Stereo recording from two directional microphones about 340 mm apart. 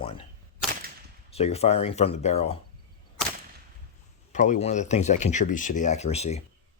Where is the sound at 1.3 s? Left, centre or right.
Centre.